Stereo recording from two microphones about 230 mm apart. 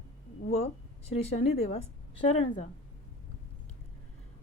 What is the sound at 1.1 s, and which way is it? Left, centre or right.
Speech, left.